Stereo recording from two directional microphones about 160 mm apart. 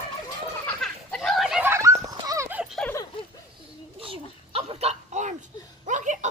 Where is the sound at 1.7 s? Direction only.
20° right (ahead or behind).